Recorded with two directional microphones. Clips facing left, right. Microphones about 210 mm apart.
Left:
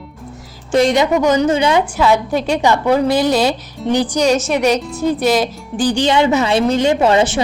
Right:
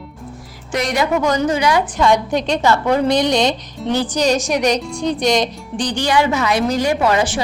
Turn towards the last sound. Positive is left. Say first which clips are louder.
# left 3 dB
turn(degrees=25)  # may be behind; listen again after turning